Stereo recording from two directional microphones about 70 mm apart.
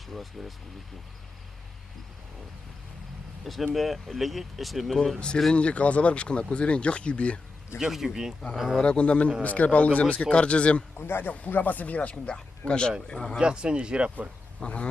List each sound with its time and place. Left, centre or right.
0.4 s speech: centre
3.4 s speech: centre
5.5 s speech: centre
7.8 s speech: centre
8.8 s speech: centre
10.9 s speech: left; by 13.4 s centre
13.4 s speech: centre
14.6 s speech: centre